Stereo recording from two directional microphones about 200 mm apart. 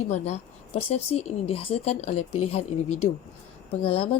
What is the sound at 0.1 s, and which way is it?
A woman's voice, 35° left (ahead or behind).